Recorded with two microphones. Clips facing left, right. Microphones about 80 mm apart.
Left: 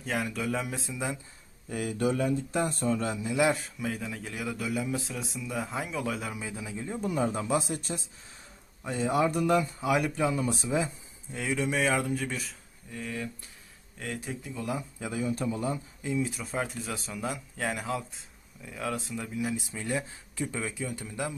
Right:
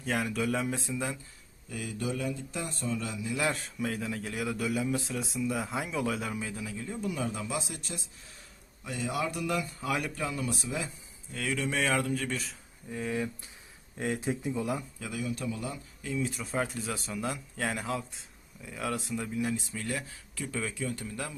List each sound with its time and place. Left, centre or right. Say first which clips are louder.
0.0 s speech: right 1 dB; centre
1.7 s speech: left 6 dB; left
3.5 s speech: left 2 dB; centre
6.6 s a man's voice: left 2 dB; left
7.0 s speech: left 5 dB; left
9.8 s speech: left 5 dB; centre
10.2 s speech: left 5 dB; left; by 12.5 s centre
12.9 s speech: right 4 dB; centre
14.6 s speech: right 1 dB; centre
14.9 s speech: left 4 dB; left
16.2 s speech: even; centre
19.7 s speech: left 3 dB; centre